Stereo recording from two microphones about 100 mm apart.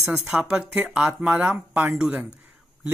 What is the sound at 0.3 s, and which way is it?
Speech, 10° right (ahead or behind).